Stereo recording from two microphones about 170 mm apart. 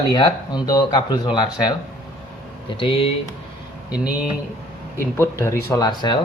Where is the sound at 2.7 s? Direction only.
30° left (ahead or behind).